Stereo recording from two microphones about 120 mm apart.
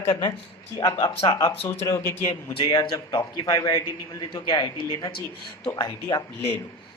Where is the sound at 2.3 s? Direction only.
45° left (ahead or behind).